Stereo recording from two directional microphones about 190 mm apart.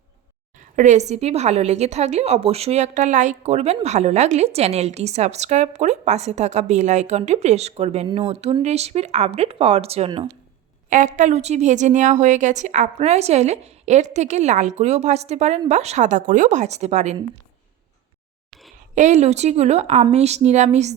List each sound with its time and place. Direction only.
0.8 s a woman's voice: 40° right (ahead or behind)
10.8 s a woman's voice: 40° right (ahead or behind)
18.9 s a woman's voice: 40° right (ahead or behind)